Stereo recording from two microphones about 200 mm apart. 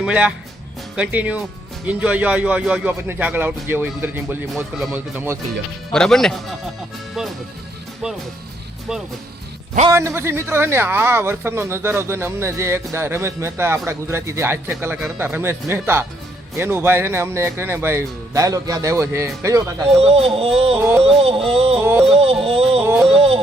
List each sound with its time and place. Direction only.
0.0 s speech: 5° right (ahead or behind)
5.9 s speech: 5° left (ahead or behind)
10.2 s speech: 10° right (ahead or behind)
20.0 s yodeling: 30° right (ahead or behind)
21.8 s speech: 10° right (ahead or behind)
22.1 s yodeling: 30° right (ahead or behind)
23.1 s a sound: 30° right (ahead or behind)